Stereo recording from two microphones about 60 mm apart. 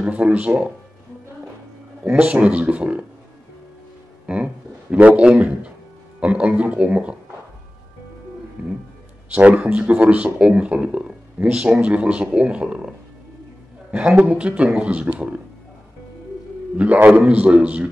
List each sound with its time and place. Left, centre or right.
0.0 s speech: right
2.1 s speech: right
4.3 s speech: centre
8.6 s speech: right
13.9 s speech: centre
16.7 s speech: right